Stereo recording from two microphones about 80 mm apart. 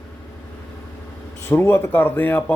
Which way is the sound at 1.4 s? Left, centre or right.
Left.